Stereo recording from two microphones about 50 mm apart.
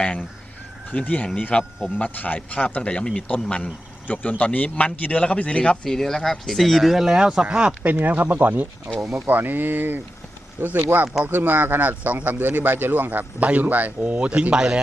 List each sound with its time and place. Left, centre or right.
0.9 s a man's voice: left
5.8 s speech: centre
7.2 s speech: centre
7.9 s a man's voice: right
8.9 s speech: centre
9.2 s a man's voice: right; by 14.8 s centre